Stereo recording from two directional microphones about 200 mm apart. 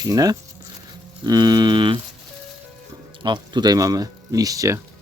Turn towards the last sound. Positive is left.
turn(degrees=-15)  # may be behind; listen again after turning